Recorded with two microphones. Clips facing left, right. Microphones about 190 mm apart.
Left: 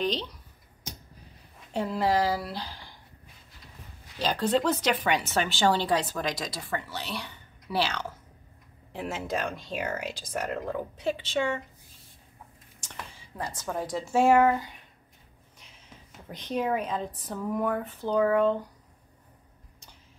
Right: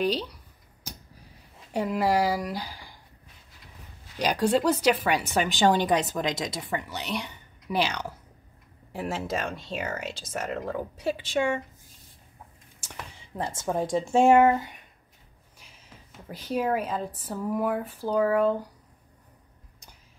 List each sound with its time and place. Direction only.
0.0 s a woman's voice: 10° right (ahead or behind)
1.7 s speech: 10° right (ahead or behind)
4.2 s a woman's voice: 15° right (ahead or behind)
8.9 s speech: centre (ahead or behind)
13.6 s speech: 25° right (ahead or behind)
16.3 s a woman's voice: 5° right (ahead or behind)